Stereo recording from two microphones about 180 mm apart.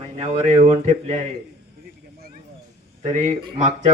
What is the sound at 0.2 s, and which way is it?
Speech, 35° right (ahead or behind).